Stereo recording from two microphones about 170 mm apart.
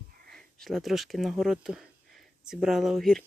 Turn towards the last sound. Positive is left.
turn(degrees=0)  # may be behind; listen again after turning